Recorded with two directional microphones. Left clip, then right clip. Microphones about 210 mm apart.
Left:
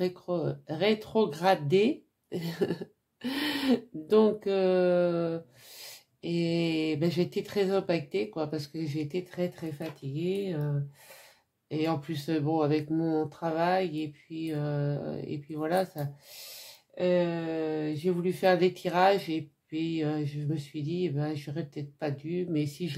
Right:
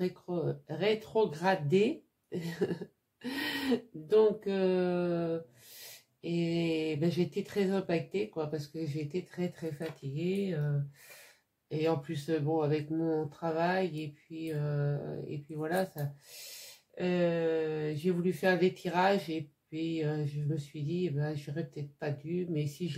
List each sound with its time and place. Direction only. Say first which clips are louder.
0.0 s speech: left 4 dB; 35° left (ahead or behind)
11.7 s speech: left 1 dB; 30° left (ahead or behind)